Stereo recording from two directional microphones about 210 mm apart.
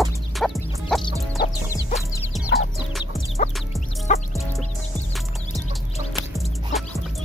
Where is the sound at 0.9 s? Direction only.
Centre (ahead or behind).